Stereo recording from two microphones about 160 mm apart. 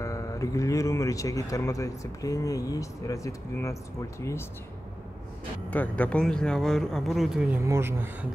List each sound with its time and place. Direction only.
0.0 s speech: 20° left (ahead or behind)
5.7 s speech: 10° left (ahead or behind)
7.6 s speech: 15° right (ahead or behind)